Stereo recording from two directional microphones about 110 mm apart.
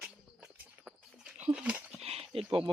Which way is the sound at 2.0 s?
65° right (ahead or behind).